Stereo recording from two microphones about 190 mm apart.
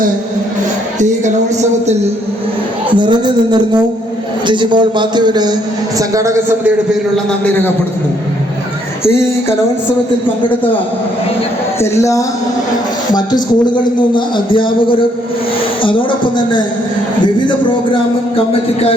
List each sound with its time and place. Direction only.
2.9 s a man's voice: 25° right (ahead or behind)
7.4 s a man's voice: 10° left (ahead or behind)
14.3 s a woman's voice: 25° left (ahead or behind)